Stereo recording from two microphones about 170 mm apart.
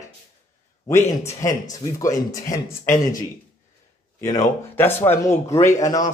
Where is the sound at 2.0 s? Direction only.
20° left (ahead or behind).